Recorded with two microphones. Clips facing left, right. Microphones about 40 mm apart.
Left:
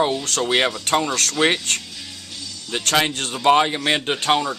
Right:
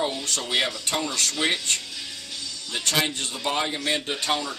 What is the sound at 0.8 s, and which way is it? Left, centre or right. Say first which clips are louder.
Speech: left 6 dB; left.